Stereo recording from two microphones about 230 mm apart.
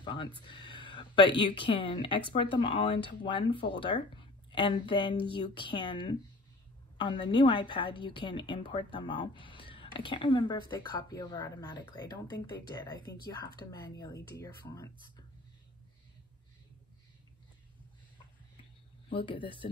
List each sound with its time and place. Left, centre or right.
0.0 s a sound: left
0.5 s speech: left
19.1 s speech: left